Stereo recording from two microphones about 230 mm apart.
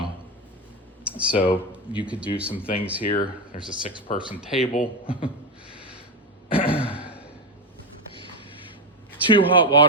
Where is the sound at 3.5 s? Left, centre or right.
Left.